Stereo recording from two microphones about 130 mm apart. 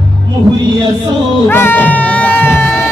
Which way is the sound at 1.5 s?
15° left (ahead or behind).